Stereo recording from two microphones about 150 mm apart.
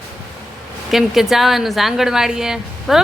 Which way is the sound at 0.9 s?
Centre (ahead or behind).